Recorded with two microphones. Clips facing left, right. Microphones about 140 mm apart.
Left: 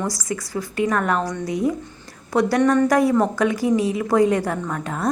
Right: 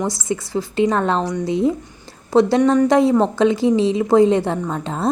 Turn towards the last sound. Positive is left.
turn(degrees=-25)  # may be behind; listen again after turning